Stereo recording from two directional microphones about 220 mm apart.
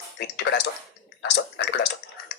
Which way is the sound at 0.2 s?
50° left (ahead or behind).